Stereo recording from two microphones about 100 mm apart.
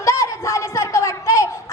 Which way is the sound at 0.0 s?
30° left (ahead or behind).